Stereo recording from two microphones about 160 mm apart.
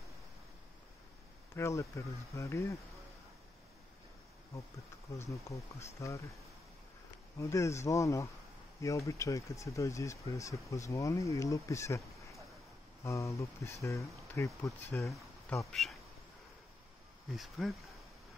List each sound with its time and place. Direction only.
1.5 s speech: 20° left (ahead or behind)
5.3 s speech: 20° left (ahead or behind)
7.3 s speech: 20° left (ahead or behind)
13.0 s speech: 20° left (ahead or behind)
15.7 s speech: centre (ahead or behind)
17.4 s speech: centre (ahead or behind)